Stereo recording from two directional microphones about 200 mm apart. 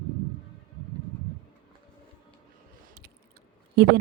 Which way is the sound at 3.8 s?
55° right (ahead or behind).